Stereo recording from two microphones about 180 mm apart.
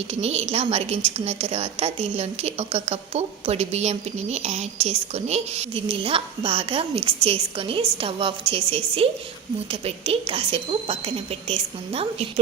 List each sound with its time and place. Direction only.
0.1 s a woman's voice: 35° right (ahead or behind)